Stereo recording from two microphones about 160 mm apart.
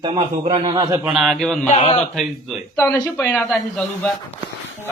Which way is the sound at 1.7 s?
45° left (ahead or behind).